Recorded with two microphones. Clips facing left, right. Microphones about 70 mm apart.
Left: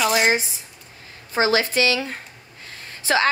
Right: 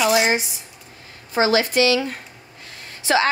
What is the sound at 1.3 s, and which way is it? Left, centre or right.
Speech, left.